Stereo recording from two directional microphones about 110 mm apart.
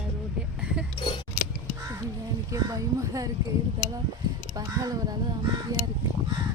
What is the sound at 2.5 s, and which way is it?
Speech, 30° right (ahead or behind).